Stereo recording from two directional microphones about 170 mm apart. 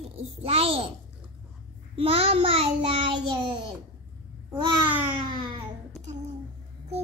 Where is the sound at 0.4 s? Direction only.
35° right (ahead or behind).